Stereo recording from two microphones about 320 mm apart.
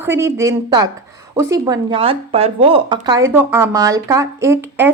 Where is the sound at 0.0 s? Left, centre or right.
Centre.